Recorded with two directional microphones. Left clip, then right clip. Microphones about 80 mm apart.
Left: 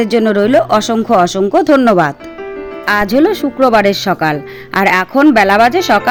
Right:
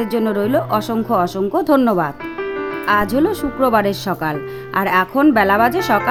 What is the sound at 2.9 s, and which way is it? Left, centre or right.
Speech, left.